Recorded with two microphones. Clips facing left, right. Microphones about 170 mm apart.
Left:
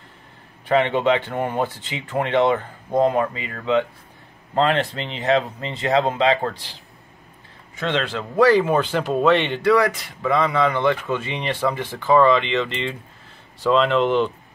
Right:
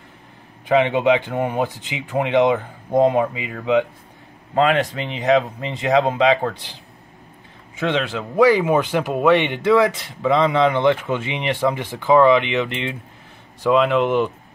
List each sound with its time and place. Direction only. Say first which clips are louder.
0.7 s speech: right 2 dB; 15° right (ahead or behind)
7.7 s speech: right 2 dB; 15° right (ahead or behind)